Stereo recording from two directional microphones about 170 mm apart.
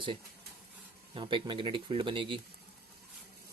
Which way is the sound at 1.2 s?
30° right (ahead or behind).